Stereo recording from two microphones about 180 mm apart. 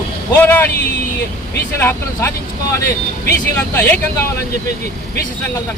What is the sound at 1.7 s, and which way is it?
Speech, 15° left (ahead or behind).